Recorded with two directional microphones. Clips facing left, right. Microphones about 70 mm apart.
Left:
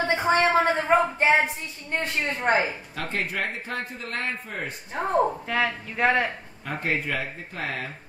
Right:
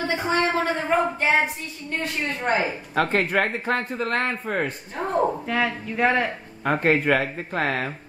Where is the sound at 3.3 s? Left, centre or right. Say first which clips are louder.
Right 7 dB; right.